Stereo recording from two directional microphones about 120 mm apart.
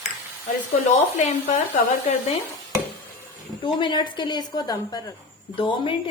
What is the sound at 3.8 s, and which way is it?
A woman's voice, 40° left (ahead or behind).